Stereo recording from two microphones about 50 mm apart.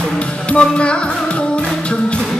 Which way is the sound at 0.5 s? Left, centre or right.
Left.